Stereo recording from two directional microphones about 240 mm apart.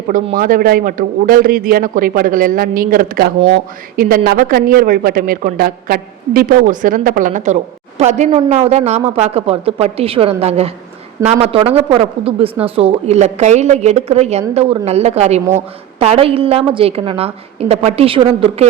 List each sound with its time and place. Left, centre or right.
0.1 s a woman's voice: right